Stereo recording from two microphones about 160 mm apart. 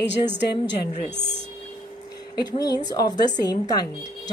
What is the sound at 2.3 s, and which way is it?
Speech, 25° left (ahead or behind).